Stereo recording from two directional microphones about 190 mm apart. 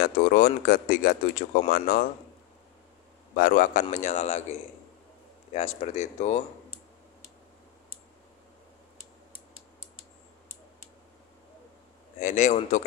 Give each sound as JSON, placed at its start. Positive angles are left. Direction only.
{"t": 0.0, "sound": "speech", "side_deg": 50}
{"t": 3.3, "sound": "speech", "side_deg": 45}
{"t": 12.2, "sound": "speech", "side_deg": 40}